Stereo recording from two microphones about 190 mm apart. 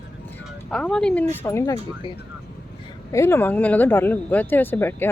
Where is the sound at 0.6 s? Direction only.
5° left (ahead or behind).